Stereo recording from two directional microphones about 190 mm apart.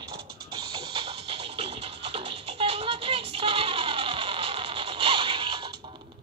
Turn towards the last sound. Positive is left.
turn(degrees=-25)  # may be behind; listen again after turning